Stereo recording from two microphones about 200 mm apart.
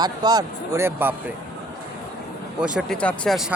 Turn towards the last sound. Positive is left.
turn(degrees=5)  # may be behind; listen again after turning